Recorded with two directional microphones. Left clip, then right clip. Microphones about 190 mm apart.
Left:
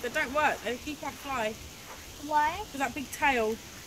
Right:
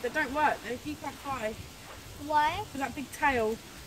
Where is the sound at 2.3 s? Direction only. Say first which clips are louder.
Even; 25° right (ahead or behind).